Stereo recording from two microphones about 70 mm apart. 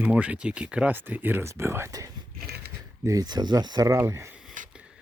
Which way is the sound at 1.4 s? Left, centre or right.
Right.